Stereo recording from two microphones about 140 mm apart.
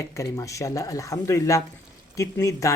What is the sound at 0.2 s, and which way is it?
Speech, 20° left (ahead or behind).